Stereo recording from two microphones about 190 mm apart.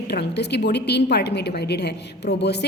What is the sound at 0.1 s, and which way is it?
A woman's voice, 60° left (ahead or behind).